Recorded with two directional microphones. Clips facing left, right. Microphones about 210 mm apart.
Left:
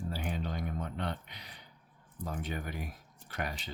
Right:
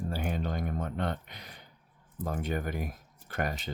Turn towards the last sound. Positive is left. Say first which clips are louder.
# right 5 dB
turn(degrees=-50)  # may be behind; listen again after turning